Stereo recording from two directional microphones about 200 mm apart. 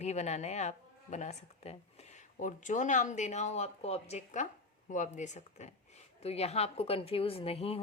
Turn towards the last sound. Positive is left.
turn(degrees=30)  # may be behind; listen again after turning